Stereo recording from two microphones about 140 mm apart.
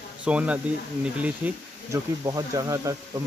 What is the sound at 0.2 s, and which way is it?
Speech, 10° right (ahead or behind).